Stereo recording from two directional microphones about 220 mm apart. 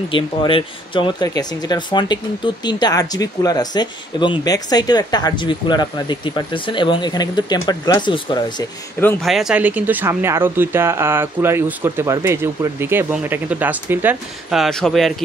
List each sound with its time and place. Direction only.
0.1 s speech: 25° left (ahead or behind)
9.0 s speech: centre (ahead or behind)